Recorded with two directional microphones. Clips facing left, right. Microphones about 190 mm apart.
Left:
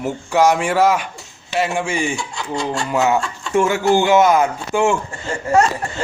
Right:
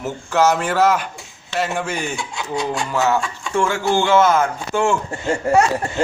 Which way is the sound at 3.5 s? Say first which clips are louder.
Left 3 dB; 20° left (ahead or behind).